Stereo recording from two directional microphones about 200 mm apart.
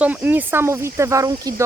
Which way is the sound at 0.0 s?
10° right (ahead or behind).